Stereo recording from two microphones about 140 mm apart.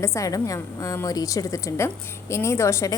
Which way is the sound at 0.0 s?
20° left (ahead or behind).